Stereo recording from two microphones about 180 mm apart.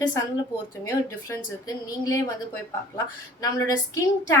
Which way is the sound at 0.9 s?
15° left (ahead or behind).